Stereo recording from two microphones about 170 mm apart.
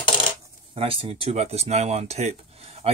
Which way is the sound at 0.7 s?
35° right (ahead or behind).